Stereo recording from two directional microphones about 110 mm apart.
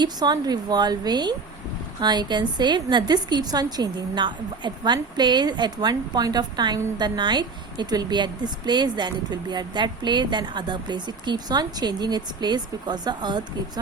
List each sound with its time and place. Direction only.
0.0 s a woman's voice: 40° right (ahead or behind)